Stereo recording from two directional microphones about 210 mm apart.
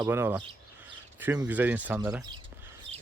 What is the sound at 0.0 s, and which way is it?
Speech, 10° right (ahead or behind).